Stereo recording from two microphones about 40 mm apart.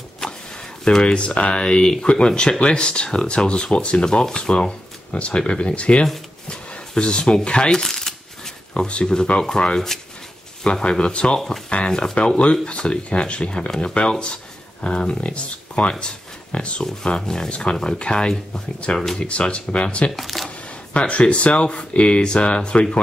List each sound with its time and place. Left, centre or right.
1.1 s speech: left
7.8 s coin: centre
8.7 s speech: left
10.6 s speech: left
11.3 s speech: centre; by 16.8 s left
16.8 s speech: centre
20.2 s speech: centre
20.4 s speech: left